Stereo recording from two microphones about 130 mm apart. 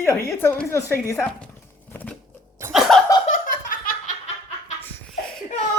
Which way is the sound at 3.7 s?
90° left.